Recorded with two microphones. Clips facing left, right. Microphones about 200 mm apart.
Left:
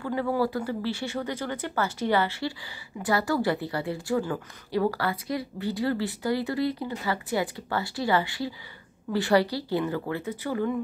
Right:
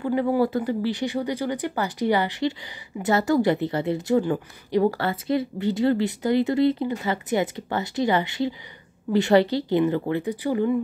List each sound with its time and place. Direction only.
0.0 s a woman's voice: 15° right (ahead or behind)